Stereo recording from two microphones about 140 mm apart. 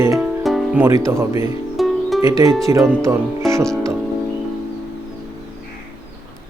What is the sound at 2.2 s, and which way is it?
Speech, 20° right (ahead or behind).